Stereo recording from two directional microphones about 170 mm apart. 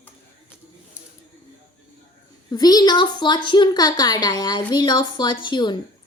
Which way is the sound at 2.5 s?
20° left (ahead or behind).